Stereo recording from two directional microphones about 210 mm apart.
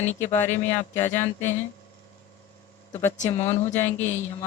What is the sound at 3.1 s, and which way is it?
Speech, 35° left (ahead or behind).